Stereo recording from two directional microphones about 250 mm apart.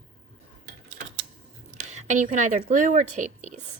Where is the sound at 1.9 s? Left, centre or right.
Right.